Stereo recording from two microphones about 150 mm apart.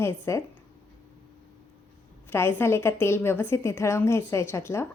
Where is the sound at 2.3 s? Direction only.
15° left (ahead or behind).